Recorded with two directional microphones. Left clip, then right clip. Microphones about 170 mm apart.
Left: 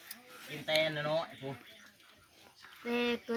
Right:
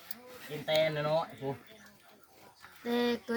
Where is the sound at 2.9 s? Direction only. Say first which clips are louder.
Right 2 dB; 35° left (ahead or behind).